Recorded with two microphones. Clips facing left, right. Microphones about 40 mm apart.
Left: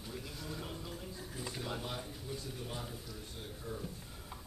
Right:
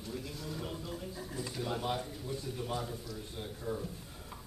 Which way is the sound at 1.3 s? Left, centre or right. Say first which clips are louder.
Right 3 dB; centre.